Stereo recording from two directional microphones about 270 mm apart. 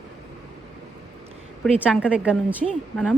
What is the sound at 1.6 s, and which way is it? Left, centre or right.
A woman's voice, centre.